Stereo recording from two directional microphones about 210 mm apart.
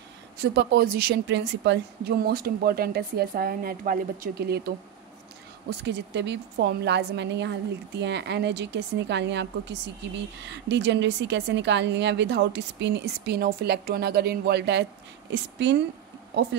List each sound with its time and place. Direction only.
0.4 s a woman's voice: 50° right (ahead or behind)